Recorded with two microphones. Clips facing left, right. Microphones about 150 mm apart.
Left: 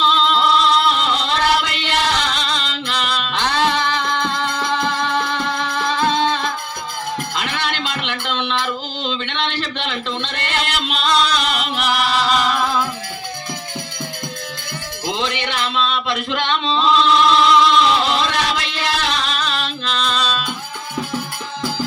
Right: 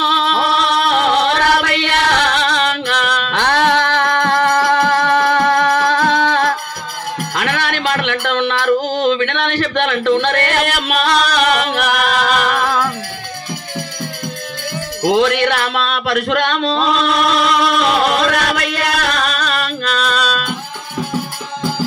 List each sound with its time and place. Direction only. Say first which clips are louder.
0.0 s chant: even; 65° right (ahead or behind)
7.3 s music: right 8 dB; 60° right (ahead or behind)
15.0 s music: right 10 dB; 60° right (ahead or behind)